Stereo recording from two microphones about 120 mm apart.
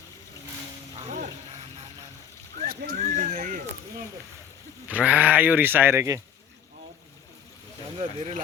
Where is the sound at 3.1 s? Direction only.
90° right.